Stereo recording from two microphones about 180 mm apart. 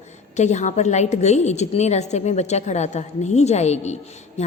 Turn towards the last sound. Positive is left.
turn(degrees=40)  # may be behind; listen again after turning